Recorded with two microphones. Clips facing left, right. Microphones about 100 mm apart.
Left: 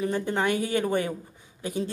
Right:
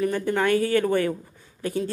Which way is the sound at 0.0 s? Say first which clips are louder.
Right 3 dB; 20° left (ahead or behind).